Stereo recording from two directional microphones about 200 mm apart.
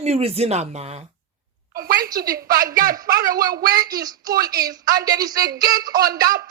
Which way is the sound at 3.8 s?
20° right (ahead or behind).